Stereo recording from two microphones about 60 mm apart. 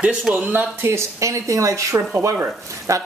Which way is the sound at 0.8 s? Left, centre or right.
Right.